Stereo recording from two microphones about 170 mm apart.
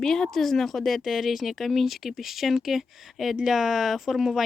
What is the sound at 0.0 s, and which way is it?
A woman's voice, centre (ahead or behind).